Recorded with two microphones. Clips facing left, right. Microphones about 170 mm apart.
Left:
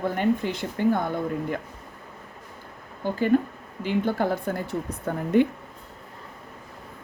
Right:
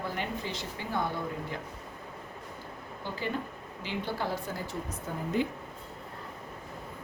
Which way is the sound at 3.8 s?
50° left (ahead or behind).